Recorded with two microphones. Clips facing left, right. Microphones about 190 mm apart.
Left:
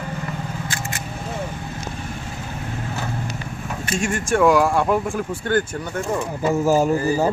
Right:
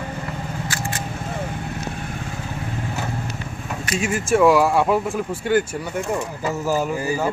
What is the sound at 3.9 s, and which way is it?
Speech, 5° right (ahead or behind).